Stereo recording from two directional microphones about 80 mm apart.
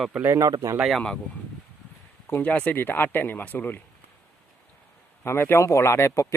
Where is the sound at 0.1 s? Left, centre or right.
Right.